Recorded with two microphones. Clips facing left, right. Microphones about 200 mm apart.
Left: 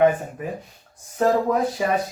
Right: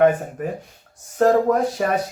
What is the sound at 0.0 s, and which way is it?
Speech, 50° right (ahead or behind).